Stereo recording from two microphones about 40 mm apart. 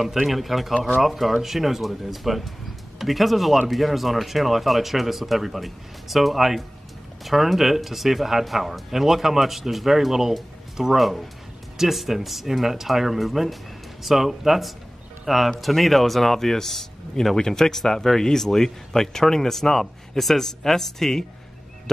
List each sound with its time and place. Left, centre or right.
0.3 s speech: centre